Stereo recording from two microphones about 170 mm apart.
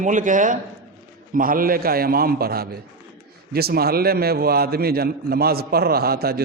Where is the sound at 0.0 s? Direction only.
50° right (ahead or behind).